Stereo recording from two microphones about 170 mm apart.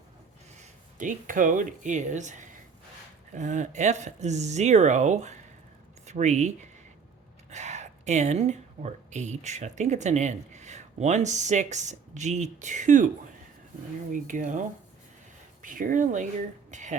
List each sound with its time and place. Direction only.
0.6 s speech: 50° right (ahead or behind)
14.1 s speech: 50° right (ahead or behind)